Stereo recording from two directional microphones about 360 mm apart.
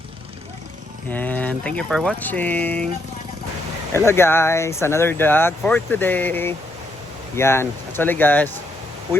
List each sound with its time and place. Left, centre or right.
1.1 s speech: centre
3.9 s speech: centre